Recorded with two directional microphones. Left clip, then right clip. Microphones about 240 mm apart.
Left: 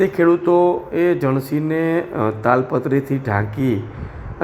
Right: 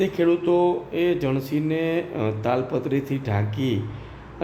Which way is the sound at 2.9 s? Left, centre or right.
Left.